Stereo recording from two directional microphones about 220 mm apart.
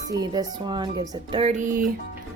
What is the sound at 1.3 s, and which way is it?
Speech, 30° right (ahead or behind).